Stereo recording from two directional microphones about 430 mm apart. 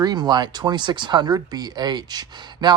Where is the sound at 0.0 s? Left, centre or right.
Centre.